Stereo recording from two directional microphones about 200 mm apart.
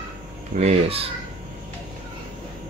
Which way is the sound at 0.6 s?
30° right (ahead or behind).